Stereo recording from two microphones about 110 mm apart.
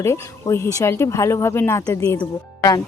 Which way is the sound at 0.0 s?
25° left (ahead or behind).